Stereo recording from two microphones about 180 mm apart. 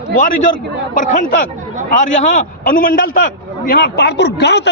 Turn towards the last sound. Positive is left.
turn(degrees=70)  # may be behind; listen again after turning